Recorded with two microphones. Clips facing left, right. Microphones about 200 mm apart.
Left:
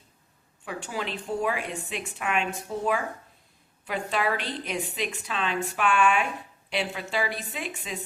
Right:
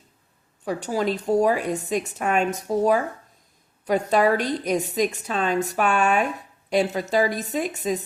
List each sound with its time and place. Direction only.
0.6 s a woman's voice: 40° right (ahead or behind)